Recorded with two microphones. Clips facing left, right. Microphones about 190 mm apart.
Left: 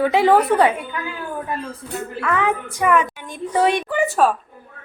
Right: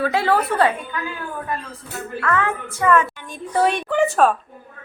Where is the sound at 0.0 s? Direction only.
20° left (ahead or behind).